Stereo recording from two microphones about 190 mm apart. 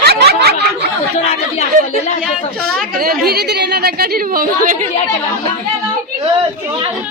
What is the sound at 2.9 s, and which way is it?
A woman's voice, 55° right (ahead or behind).